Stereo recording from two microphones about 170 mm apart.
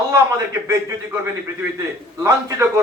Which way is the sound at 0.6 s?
15° right (ahead or behind).